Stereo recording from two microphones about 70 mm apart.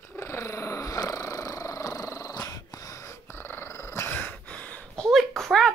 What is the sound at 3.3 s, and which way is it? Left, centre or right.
Dog, left.